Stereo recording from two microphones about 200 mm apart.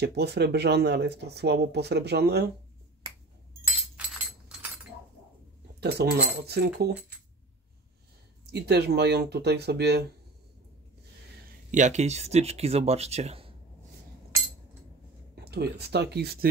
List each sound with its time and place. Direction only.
0.0 s speech: 55° right (ahead or behind)
5.8 s speech: 55° right (ahead or behind)
8.5 s speech: 55° right (ahead or behind)
11.7 s speech: 35° right (ahead or behind)
15.4 s speech: 55° right (ahead or behind)